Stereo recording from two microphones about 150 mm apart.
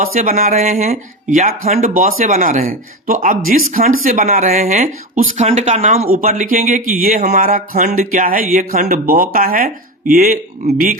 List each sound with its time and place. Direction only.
0.1 s speech: 65° right (ahead or behind)
0.5 s speech: 55° right (ahead or behind)
1.9 s speech: 65° right (ahead or behind)
5.5 s speech: 45° right (ahead or behind)
6.1 s speech: 60° right (ahead or behind)